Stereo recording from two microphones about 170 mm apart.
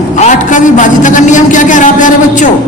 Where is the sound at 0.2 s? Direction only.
50° left (ahead or behind).